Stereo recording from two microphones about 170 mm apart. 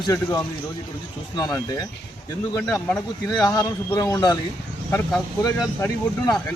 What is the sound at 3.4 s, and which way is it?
Speech, 20° left (ahead or behind).